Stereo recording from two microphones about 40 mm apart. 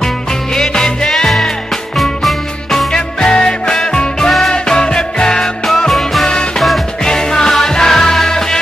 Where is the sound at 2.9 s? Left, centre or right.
Centre.